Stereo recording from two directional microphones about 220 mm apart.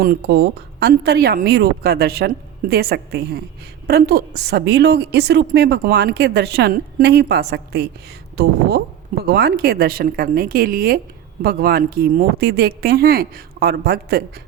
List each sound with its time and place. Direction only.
0.0 s a woman's voice: 45° right (ahead or behind)
9.3 s a woman's voice: 45° right (ahead or behind)